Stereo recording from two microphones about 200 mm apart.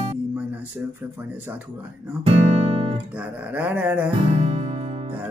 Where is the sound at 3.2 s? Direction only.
5° right (ahead or behind).